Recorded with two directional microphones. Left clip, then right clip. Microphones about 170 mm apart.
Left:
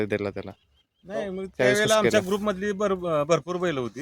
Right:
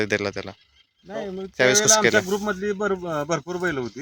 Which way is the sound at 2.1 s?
35° left (ahead or behind).